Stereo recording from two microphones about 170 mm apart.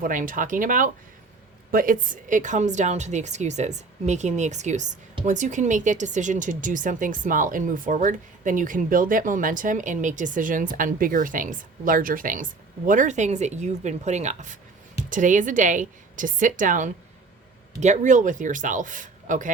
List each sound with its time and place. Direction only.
0.0 s speech: 50° right (ahead or behind)